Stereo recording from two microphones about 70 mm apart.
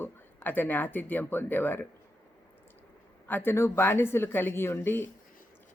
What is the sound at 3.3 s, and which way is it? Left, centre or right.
Speech, left.